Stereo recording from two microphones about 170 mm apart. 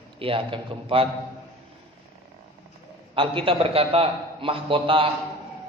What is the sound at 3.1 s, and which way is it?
A man's voice, 30° right (ahead or behind).